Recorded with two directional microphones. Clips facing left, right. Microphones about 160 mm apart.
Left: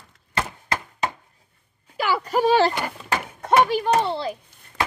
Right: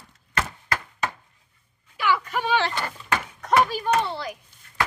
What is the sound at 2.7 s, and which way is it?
Speech, 15° left (ahead or behind).